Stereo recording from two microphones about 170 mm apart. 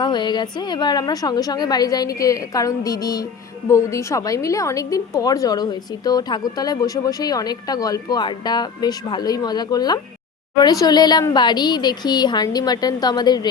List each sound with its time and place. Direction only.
0.0 s a woman's voice: 25° left (ahead or behind)